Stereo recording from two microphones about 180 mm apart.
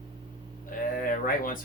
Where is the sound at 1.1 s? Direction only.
50° left (ahead or behind).